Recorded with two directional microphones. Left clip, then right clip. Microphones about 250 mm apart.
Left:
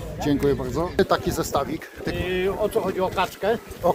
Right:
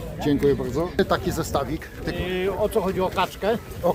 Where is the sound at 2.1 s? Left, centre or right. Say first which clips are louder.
Left 1 dB; centre.